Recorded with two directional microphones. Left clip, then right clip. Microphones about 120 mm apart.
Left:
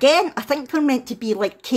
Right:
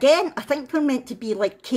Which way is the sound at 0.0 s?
30° left (ahead or behind).